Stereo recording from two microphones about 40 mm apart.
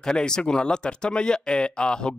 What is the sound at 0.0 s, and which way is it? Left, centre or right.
Speech, centre.